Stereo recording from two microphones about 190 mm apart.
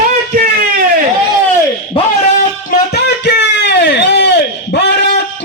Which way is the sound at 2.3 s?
55° left (ahead or behind).